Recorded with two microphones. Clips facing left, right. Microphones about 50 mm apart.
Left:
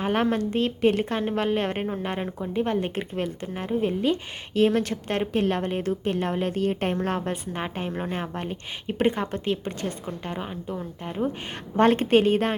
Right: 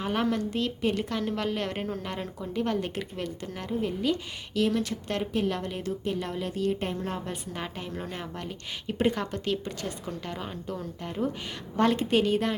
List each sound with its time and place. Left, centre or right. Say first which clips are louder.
0.0 s a woman's voice: left 4 dB; left
7.5 s a woman's voice: left 5 dB; left
11.8 s a woman's voice: left 5 dB; left